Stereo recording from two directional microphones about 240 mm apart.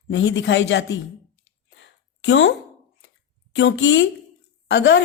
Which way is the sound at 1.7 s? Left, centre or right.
Left.